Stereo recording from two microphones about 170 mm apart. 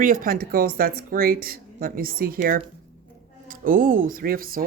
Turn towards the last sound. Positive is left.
turn(degrees=-55)  # may be behind; listen again after turning